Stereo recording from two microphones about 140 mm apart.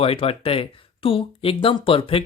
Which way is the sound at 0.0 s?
45° left (ahead or behind).